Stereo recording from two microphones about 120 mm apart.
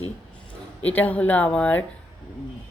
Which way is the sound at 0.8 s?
15° left (ahead or behind).